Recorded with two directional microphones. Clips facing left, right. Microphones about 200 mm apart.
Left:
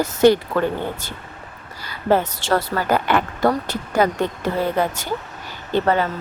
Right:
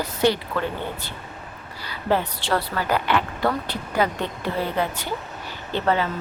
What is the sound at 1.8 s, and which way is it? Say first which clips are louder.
A woman's voice: left 4 dB; 45° left (ahead or behind).